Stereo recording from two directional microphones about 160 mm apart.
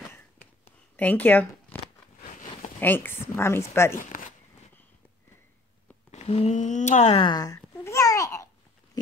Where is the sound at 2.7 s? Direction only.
10° left (ahead or behind).